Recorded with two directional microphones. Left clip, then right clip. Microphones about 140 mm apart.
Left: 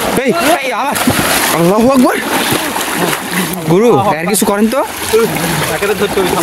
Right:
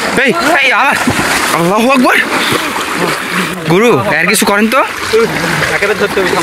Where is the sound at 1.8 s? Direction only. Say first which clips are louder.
Right 2 dB; 40° left (ahead or behind).